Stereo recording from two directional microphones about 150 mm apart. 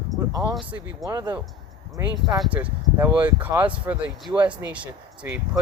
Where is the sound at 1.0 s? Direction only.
25° right (ahead or behind).